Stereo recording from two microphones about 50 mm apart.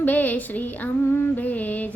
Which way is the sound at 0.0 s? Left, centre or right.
Left.